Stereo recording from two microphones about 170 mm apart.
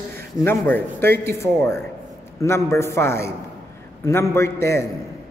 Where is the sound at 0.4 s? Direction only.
15° left (ahead or behind).